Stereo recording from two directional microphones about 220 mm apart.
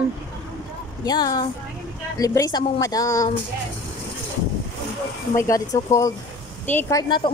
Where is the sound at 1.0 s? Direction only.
15° left (ahead or behind).